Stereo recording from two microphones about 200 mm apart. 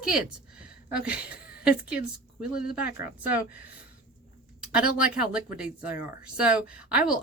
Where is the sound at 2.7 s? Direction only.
5° right (ahead or behind).